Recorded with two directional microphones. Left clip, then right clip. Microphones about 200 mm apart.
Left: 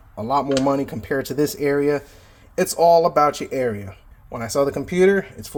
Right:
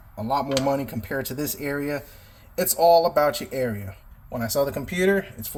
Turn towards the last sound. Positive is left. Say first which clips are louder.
# left 5 dB
turn(degrees=35)  # may be behind; listen again after turning